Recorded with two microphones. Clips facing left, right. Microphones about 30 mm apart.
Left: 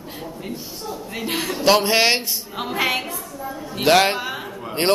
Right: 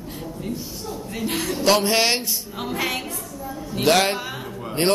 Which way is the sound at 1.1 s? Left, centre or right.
Centre.